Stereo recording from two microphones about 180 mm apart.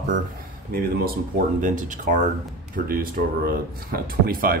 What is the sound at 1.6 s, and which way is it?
Speech, 45° right (ahead or behind).